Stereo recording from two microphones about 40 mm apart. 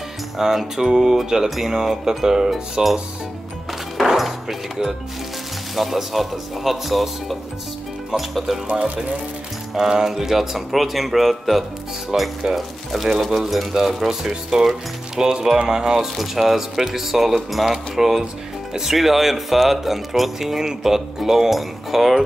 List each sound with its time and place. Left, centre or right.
0.4 s speech: centre
4.0 s music: centre
5.8 s speech: centre
8.6 s speech: right
9.8 s speech: centre
12.1 s speech: centre
12.5 s speech: centre